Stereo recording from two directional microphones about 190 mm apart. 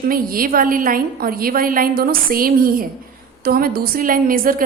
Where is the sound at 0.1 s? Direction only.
50° right (ahead or behind).